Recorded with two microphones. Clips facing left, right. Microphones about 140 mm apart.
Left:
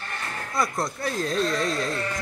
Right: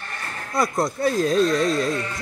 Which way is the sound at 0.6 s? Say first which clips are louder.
Right 5 dB; 20° right (ahead or behind).